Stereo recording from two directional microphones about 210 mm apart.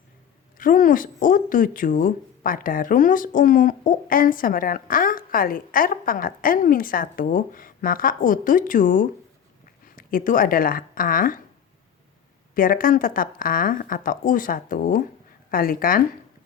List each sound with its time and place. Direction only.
0.5 s speech: 40° left (ahead or behind)
12.5 s speech: 40° left (ahead or behind)